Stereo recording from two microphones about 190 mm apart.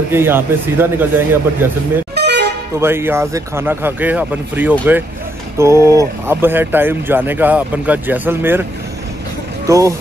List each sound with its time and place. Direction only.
0.1 s speech: 10° right (ahead or behind)
2.1 s vehicle: 60° right (ahead or behind)
2.8 s speech: 10° right (ahead or behind)
9.7 s speech: 15° right (ahead or behind)